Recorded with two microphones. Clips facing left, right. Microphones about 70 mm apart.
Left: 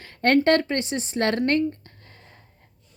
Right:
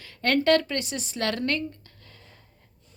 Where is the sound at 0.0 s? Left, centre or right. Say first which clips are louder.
Left 4 dB; left.